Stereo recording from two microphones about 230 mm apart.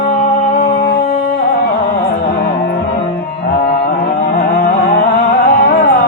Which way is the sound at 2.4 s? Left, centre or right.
Left.